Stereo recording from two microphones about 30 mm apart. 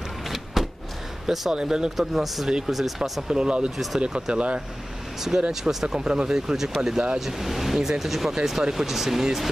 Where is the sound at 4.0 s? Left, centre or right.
Right.